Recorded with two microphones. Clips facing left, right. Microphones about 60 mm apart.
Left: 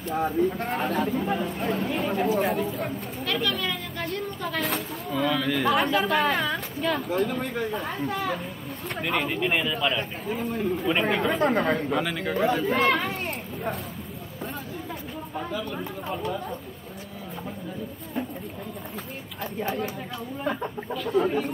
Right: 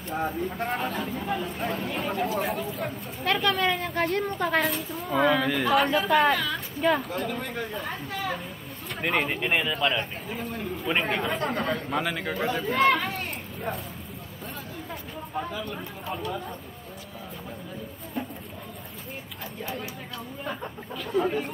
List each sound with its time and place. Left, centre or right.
0.1 s speech: centre
3.3 s a woman's voice: right
5.5 s speech: centre
6.8 s speech: centre
7.2 s speech: centre
9.4 s speech: centre
10.9 s speech: centre
11.3 s speech: centre
15.3 s speech: centre
20.9 s speech: centre